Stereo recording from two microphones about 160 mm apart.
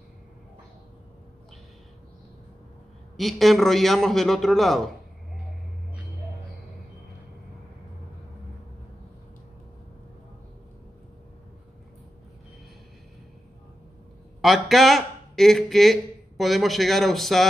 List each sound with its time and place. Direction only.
3.2 s a man's voice: centre (ahead or behind)
14.4 s speech: centre (ahead or behind)